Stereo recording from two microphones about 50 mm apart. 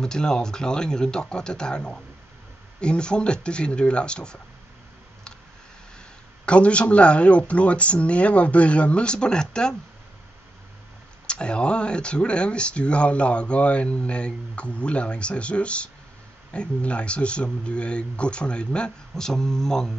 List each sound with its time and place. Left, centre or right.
0.0 s speech: centre
6.4 s speech: left
11.2 s speech: left